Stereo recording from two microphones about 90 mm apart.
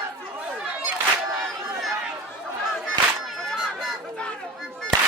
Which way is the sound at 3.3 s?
Centre (ahead or behind).